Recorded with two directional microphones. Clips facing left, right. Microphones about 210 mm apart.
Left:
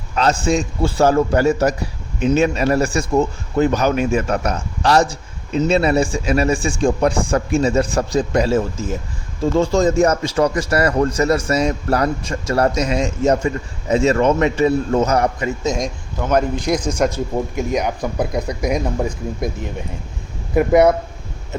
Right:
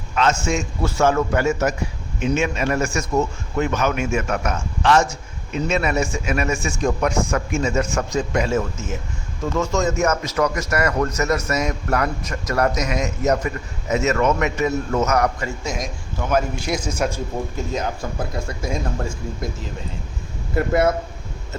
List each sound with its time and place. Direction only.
0.2 s a man's voice: 35° left (ahead or behind)
16.6 s a man's voice: 10° right (ahead or behind)
17.6 s a man's voice: 15° left (ahead or behind)